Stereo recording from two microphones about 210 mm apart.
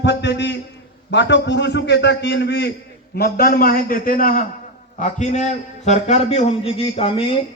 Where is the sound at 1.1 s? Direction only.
55° left (ahead or behind).